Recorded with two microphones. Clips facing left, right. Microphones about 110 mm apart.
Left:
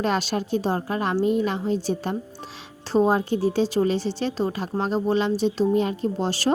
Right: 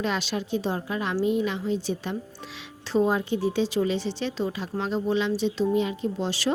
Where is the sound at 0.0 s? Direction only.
45° left (ahead or behind).